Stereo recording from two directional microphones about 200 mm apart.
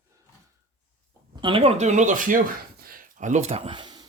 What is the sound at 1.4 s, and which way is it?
Speech, 25° right (ahead or behind).